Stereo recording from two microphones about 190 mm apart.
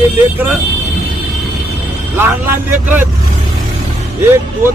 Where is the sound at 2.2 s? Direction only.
10° right (ahead or behind).